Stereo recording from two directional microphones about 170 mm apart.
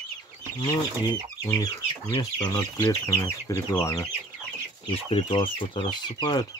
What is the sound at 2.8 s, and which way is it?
Speech, 20° left (ahead or behind).